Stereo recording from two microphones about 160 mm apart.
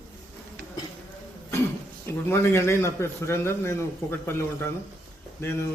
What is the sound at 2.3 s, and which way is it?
A man's voice, 15° left (ahead or behind).